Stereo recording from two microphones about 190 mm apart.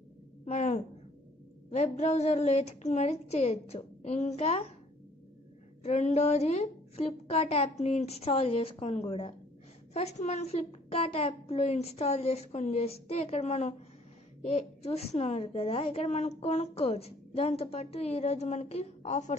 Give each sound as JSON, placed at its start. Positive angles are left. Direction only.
{"t": 0.5, "sound": "a woman's voice", "side_deg": 40}
{"t": 5.8, "sound": "a woman's voice", "side_deg": 35}